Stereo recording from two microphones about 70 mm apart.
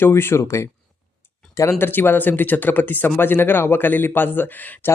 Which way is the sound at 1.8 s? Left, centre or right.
Left.